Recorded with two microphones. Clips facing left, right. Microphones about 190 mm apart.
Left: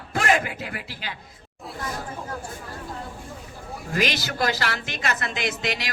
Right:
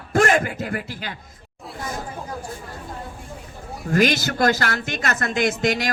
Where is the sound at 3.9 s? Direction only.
50° right (ahead or behind).